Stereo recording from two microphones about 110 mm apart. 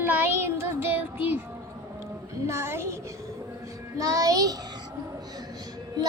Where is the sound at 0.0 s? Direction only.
15° right (ahead or behind).